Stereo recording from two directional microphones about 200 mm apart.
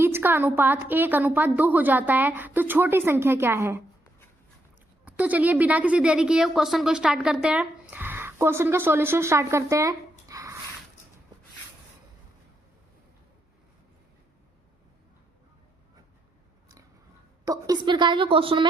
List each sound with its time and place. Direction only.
0.0 s a woman's voice: 10° right (ahead or behind)
5.0 s a woman's voice: 5° right (ahead or behind)
17.4 s a woman's voice: 20° right (ahead or behind)